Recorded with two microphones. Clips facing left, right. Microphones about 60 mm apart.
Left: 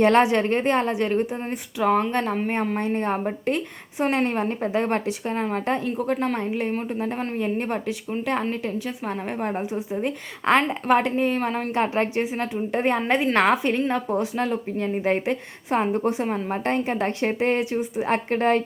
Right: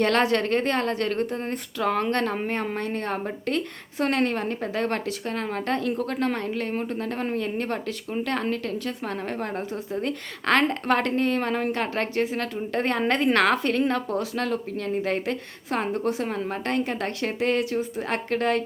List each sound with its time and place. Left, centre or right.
0.0 s a woman's voice: centre